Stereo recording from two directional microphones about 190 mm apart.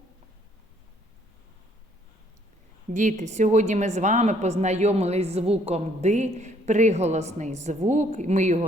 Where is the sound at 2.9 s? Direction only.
40° right (ahead or behind).